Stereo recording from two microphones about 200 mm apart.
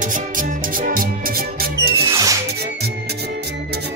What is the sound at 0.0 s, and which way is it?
Music, 40° right (ahead or behind).